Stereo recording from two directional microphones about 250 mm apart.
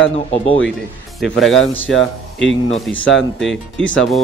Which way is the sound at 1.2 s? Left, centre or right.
Centre.